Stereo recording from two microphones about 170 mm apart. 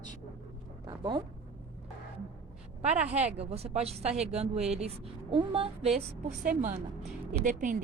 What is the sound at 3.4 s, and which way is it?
A woman's voice, 35° right (ahead or behind).